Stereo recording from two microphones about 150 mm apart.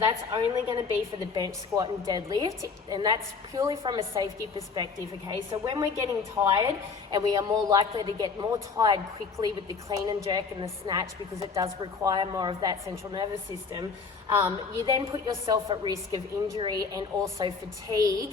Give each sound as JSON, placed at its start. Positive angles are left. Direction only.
{"t": 0.1, "sound": "a woman's voice", "side_deg": -30}
{"t": 5.5, "sound": "a woman's voice", "side_deg": -30}
{"t": 12.0, "sound": "a woman's voice", "side_deg": -25}
{"t": 14.3, "sound": "a woman's voice", "side_deg": -15}
{"t": 14.8, "sound": "a woman's voice", "side_deg": -35}